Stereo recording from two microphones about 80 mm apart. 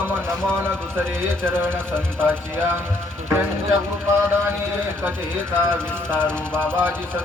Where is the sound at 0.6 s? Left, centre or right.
Right.